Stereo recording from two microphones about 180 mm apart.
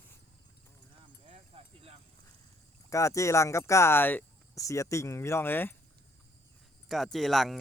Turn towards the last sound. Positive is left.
turn(degrees=0)  # may be behind; listen again after turning